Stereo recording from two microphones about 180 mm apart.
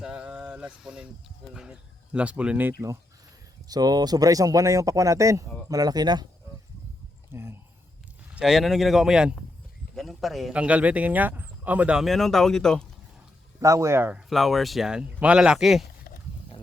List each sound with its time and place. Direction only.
0.0 s a sound: 5° right (ahead or behind)
1.5 s speech: 5° right (ahead or behind)
3.7 s speech: 20° right (ahead or behind)
7.3 s speech: 15° right (ahead or behind); by 12.8 s 5° left (ahead or behind)
13.6 s speech: 15° right (ahead or behind)
14.3 s speech: centre (ahead or behind)